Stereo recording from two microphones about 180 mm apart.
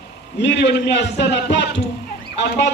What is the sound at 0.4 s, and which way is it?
A man's voice, 70° left (ahead or behind).